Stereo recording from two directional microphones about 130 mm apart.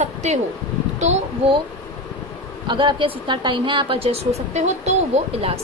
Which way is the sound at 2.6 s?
40° right (ahead or behind).